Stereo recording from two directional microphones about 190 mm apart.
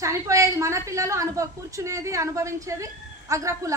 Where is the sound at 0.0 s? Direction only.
15° right (ahead or behind).